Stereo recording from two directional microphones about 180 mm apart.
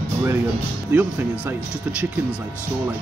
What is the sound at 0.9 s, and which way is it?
Speech, 10° right (ahead or behind).